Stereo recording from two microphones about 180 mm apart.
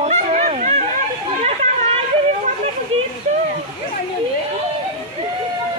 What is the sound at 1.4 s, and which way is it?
Chatter, 40° right (ahead or behind).